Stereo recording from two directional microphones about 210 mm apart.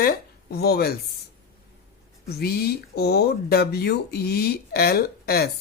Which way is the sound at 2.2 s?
50° left (ahead or behind).